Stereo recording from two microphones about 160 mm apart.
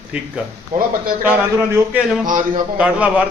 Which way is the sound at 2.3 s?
55° right (ahead or behind).